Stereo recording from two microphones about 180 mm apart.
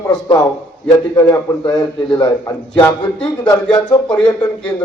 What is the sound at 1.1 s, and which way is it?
A man's voice, 20° left (ahead or behind).